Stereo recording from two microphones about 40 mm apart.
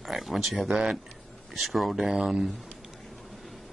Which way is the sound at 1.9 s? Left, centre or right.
Centre.